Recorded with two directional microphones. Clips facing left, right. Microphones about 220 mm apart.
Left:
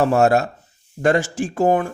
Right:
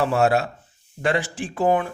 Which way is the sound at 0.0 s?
45° left (ahead or behind).